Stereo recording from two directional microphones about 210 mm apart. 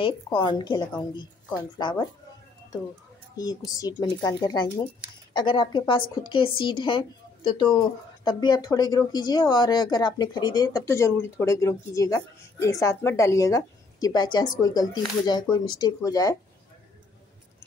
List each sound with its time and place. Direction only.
0.0 s a woman's voice: 20° left (ahead or behind)
3.3 s a woman's voice: 15° left (ahead or behind)